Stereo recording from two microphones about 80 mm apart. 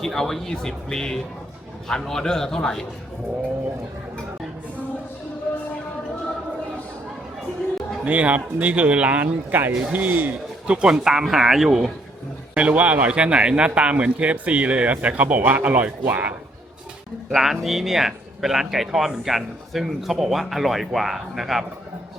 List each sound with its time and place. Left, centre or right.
0.0 s speech: centre
8.0 s speech: centre
10.7 s speech: centre
12.5 s speech: centre
17.3 s speech: centre